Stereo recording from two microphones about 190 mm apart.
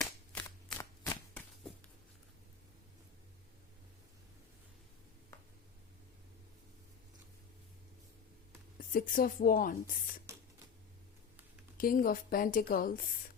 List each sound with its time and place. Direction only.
0.0 s shuffling cards: 15° left (ahead or behind)
8.9 s speech: 50° left (ahead or behind)
11.8 s speech: 50° left (ahead or behind)